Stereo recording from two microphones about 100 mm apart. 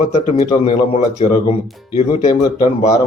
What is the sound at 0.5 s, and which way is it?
Speech, 65° left (ahead or behind).